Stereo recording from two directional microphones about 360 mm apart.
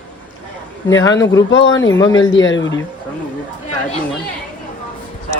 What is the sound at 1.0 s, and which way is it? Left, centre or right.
Speech, centre.